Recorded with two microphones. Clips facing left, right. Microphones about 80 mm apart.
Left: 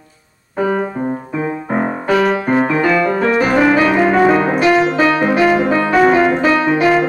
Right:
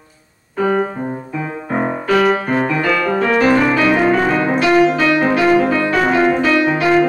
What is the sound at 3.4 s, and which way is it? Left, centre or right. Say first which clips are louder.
Music: left 1 dB; centre.